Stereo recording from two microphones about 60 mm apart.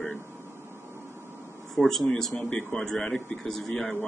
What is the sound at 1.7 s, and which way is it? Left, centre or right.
Speech, centre.